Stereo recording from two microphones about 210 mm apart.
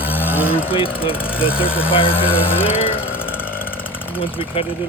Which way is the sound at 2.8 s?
25° left (ahead or behind).